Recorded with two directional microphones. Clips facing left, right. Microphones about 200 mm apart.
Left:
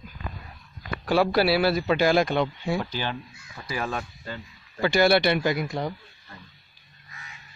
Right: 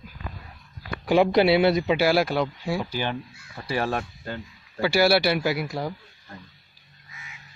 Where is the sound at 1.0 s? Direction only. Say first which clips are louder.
Right 3 dB; 20° right (ahead or behind).